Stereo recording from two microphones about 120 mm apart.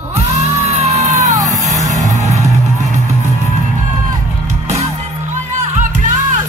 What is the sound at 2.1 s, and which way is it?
Music, 70° right (ahead or behind).